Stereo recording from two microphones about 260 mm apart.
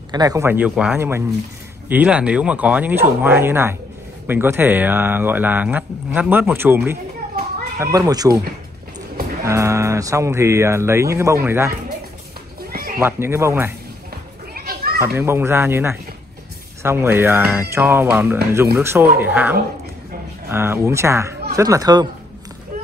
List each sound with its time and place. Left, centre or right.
0.1 s speech: centre
9.4 s speech: centre
13.0 s speech: centre
14.5 s children playing: right
15.0 s speech: centre